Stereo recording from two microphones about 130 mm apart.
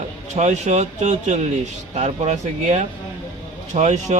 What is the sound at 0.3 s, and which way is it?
Speech, 60° right (ahead or behind).